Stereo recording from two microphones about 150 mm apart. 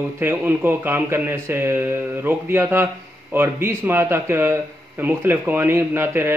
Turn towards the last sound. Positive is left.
turn(degrees=-15)  # may be behind; listen again after turning